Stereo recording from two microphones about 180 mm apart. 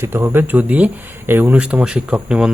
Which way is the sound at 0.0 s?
15° right (ahead or behind).